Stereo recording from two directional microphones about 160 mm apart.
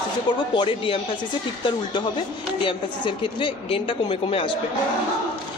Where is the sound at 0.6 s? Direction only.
30° left (ahead or behind).